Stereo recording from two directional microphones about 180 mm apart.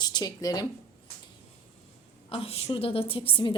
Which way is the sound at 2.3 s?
35° left (ahead or behind).